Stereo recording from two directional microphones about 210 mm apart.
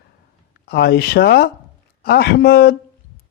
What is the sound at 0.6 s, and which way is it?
A man's voice, 50° left (ahead or behind).